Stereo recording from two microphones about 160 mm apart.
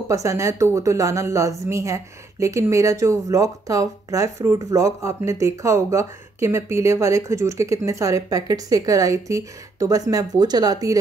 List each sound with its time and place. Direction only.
0.1 s a woman's voice: 20° right (ahead or behind)